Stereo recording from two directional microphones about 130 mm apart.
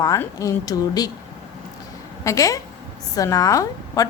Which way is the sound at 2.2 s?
25° left (ahead or behind).